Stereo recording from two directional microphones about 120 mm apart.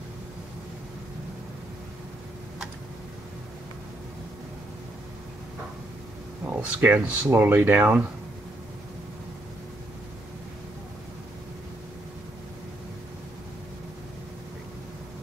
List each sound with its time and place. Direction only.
6.5 s speech: 15° right (ahead or behind)